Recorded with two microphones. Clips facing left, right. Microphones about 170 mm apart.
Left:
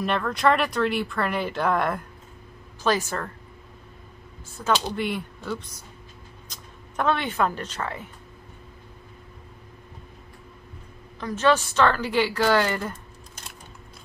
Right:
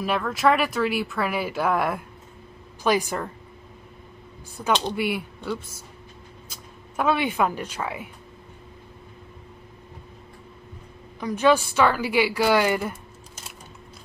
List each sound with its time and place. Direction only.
0.0 s a woman's voice: 5° right (ahead or behind)
4.6 s a woman's voice: 15° right (ahead or behind)
11.1 s a woman's voice: 10° right (ahead or behind)